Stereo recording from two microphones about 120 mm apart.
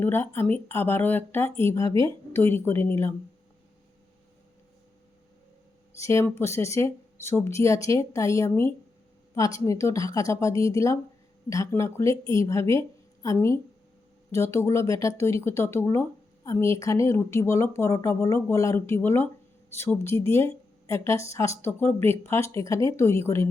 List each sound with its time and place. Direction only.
0.0 s speech: 20° left (ahead or behind)
6.0 s speech: 25° left (ahead or behind)